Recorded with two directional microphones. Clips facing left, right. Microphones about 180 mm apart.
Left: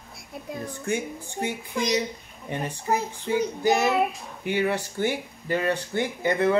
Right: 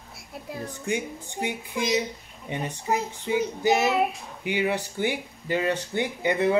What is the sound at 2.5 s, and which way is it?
Speech, 15° right (ahead or behind).